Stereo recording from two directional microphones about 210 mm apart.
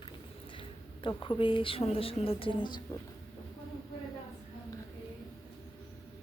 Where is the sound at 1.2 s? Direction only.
25° left (ahead or behind).